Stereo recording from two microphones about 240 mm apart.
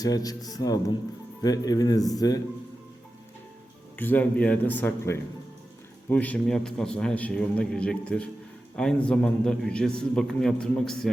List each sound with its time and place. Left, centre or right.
0.0 s a man's voice: centre
3.9 s a man's voice: centre